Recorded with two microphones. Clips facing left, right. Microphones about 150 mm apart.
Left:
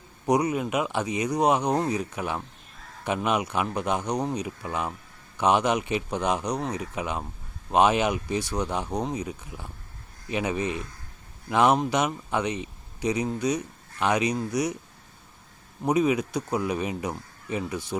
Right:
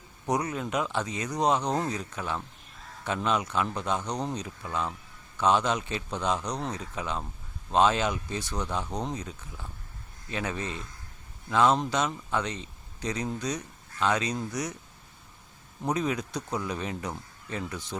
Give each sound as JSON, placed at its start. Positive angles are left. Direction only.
{"t": 0.3, "sound": "speech", "side_deg": 10}
{"t": 15.8, "sound": "speech", "side_deg": 10}